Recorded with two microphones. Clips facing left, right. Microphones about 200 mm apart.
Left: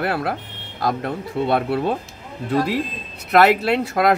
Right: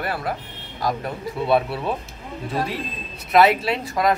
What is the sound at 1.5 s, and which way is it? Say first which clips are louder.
Speech: even; 55° left (ahead or behind).